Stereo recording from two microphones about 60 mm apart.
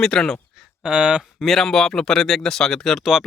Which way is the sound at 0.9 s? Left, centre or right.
Centre.